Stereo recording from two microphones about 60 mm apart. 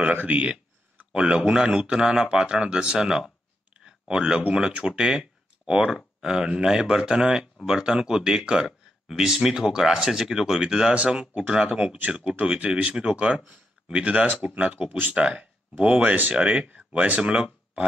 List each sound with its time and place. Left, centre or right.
0.0 s speech: right